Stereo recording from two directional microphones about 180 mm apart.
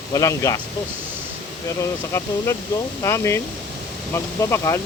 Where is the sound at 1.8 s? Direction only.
15° left (ahead or behind).